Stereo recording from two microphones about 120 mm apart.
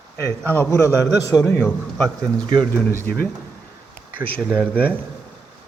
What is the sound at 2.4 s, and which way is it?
Speech, 40° right (ahead or behind).